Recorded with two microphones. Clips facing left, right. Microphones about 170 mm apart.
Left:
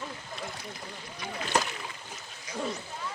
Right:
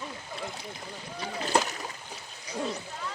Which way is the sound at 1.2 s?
35° right (ahead or behind).